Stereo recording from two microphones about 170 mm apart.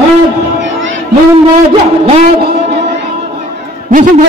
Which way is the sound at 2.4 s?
80° right.